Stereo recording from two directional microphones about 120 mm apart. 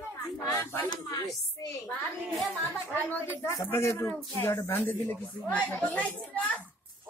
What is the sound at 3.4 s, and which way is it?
A man's voice, 25° left (ahead or behind).